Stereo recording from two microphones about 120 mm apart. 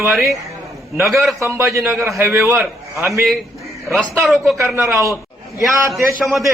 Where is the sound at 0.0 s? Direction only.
20° right (ahead or behind).